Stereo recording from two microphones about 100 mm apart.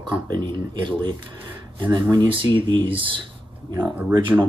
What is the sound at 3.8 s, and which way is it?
Speech, 15° right (ahead or behind).